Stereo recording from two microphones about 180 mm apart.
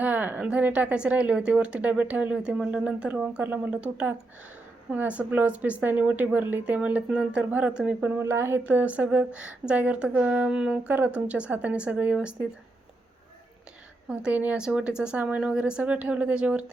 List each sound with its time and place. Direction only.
0.0 s speech: 10° right (ahead or behind)
14.1 s speech: 5° right (ahead or behind)